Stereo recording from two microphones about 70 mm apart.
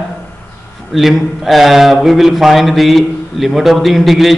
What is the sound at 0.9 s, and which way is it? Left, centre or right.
A man's voice, centre.